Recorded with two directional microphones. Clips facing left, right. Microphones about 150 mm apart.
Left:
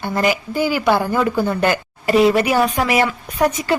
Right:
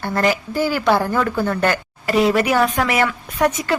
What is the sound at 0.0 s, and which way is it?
A woman's voice, 5° left (ahead or behind).